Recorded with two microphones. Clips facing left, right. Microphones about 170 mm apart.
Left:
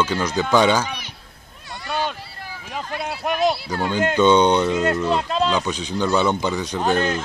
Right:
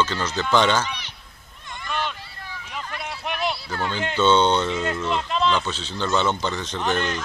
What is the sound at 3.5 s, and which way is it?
Children playing, 30° left (ahead or behind).